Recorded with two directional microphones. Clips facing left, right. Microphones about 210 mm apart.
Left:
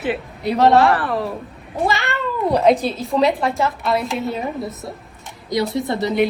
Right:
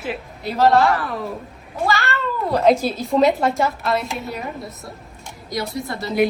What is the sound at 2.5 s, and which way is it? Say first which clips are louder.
A woman's voice: even; centre (ahead or behind).